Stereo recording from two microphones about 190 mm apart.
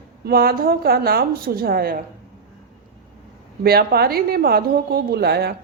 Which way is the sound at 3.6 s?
55° right (ahead or behind).